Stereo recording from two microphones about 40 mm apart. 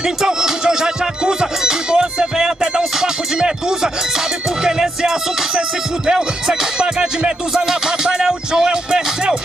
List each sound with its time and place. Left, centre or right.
0.0 s music: centre